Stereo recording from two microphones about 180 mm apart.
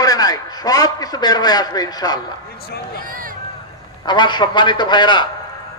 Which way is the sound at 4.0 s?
25° left (ahead or behind).